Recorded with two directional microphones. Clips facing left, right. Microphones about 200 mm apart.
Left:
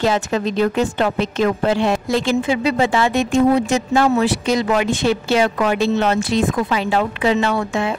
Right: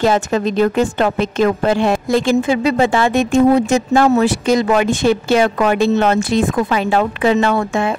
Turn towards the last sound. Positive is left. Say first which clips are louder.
# right 3 dB
turn(degrees=-50)  # may be behind; listen again after turning